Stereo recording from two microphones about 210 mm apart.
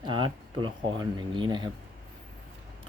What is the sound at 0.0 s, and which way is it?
Speech, 20° right (ahead or behind).